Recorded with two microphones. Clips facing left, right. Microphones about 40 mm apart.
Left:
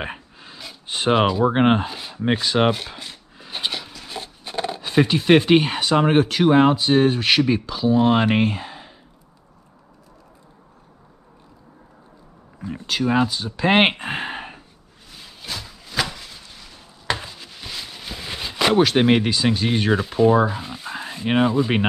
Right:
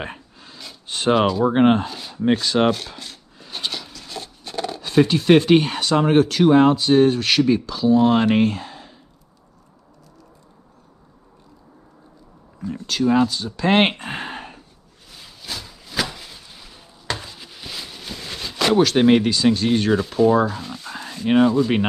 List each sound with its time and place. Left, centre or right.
0.0 s speech: centre
12.5 s speech: centre
15.0 s a sound: centre